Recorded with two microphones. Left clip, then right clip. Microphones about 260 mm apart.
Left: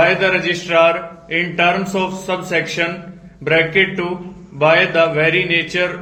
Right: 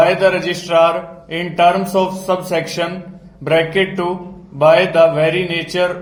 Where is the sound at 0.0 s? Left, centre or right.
Right.